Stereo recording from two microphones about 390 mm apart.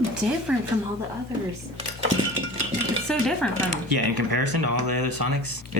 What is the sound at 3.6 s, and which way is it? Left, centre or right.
Speech, right.